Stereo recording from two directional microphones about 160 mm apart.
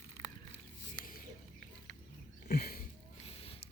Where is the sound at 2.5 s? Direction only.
75° left (ahead or behind).